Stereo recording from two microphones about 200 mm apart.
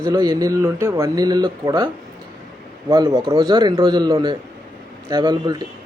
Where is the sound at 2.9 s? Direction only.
20° right (ahead or behind).